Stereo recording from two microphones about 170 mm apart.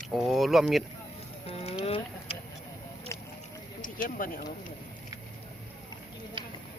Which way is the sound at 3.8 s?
50° left (ahead or behind).